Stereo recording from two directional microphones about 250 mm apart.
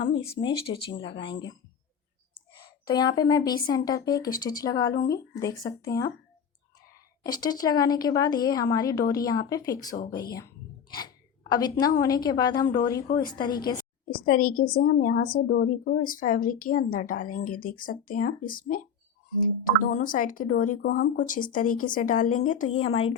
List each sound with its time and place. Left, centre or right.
0.2 s speech: left
2.8 s speech: centre
7.3 s speech: centre
10.0 s a sound: centre
11.9 s speech: centre
14.0 s speech: left